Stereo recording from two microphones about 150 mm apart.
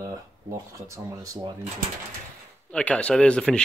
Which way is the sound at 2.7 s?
10° left (ahead or behind).